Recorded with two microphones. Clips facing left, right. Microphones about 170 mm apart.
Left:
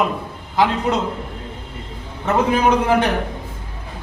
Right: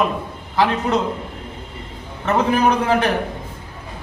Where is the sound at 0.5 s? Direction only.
15° left (ahead or behind).